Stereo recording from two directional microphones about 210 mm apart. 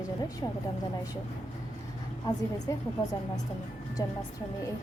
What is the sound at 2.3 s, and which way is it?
Speech, 20° left (ahead or behind).